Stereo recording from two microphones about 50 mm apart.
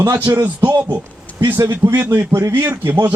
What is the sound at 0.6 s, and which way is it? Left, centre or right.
Speech, right.